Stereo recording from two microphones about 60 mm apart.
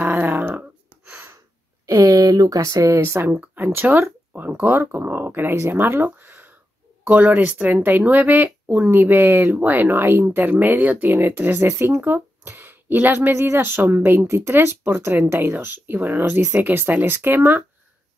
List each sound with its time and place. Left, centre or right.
0.0 s a sound: right
1.9 s a sound: right
2.7 s a woman's voice: right
3.5 s speech: right
4.6 s speech: right
7.2 s speech: right